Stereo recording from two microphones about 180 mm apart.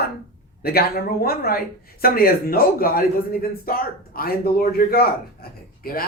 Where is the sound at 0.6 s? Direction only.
60° left (ahead or behind).